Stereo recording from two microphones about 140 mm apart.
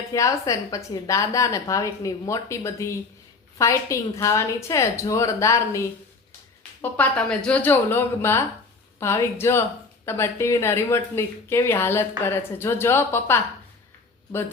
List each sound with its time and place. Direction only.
0.1 s a woman's voice: 25° left (ahead or behind)